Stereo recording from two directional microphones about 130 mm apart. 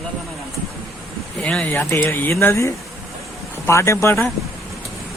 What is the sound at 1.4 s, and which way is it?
Speech, 10° left (ahead or behind).